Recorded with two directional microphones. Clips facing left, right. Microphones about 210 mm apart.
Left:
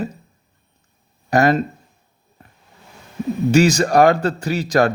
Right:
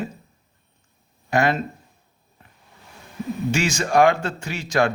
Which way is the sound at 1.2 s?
40° left (ahead or behind).